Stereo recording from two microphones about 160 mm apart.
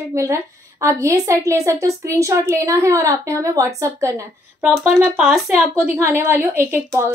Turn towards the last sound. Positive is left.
turn(degrees=-15)  # may be behind; listen again after turning